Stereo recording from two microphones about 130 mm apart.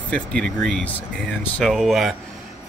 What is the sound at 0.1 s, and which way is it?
Speech, 10° left (ahead or behind).